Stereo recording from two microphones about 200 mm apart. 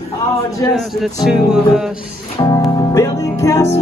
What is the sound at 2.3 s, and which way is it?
Music, 15° left (ahead or behind).